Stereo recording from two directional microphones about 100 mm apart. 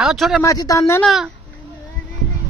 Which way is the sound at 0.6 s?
35° left (ahead or behind).